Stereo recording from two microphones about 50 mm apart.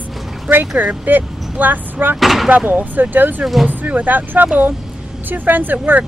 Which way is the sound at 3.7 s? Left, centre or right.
Right.